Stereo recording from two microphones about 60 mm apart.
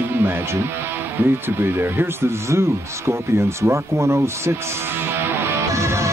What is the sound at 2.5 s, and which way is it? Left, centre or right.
Speech, right.